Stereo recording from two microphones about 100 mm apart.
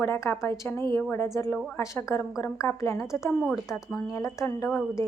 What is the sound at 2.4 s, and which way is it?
Speech, 30° left (ahead or behind).